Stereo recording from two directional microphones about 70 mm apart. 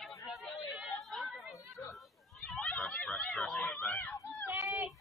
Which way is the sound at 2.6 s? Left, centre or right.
Centre.